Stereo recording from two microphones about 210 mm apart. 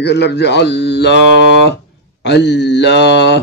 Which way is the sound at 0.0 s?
55° left (ahead or behind).